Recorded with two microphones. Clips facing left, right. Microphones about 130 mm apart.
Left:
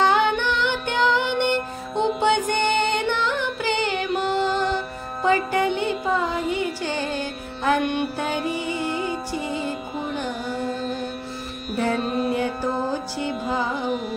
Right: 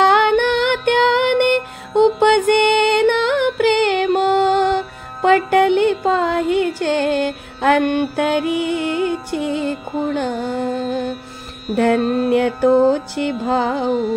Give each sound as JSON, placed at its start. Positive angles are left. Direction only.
{"t": 0.0, "sound": "music", "side_deg": -60}
{"t": 8.9, "sound": "music", "side_deg": 0}
{"t": 9.3, "sound": "music", "side_deg": -60}
{"t": 11.7, "sound": "music", "side_deg": -70}